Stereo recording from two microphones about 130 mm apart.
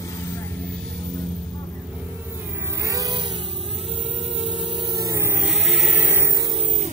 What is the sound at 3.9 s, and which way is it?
Music, 50° right (ahead or behind).